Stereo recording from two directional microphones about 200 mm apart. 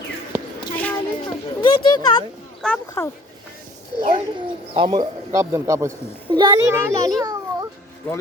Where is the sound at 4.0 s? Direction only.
25° right (ahead or behind).